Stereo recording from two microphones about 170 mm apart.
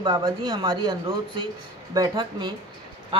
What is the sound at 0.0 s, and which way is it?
Speech, 25° right (ahead or behind).